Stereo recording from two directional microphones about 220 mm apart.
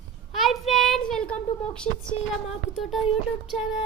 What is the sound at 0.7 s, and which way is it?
Child singing, centre (ahead or behind).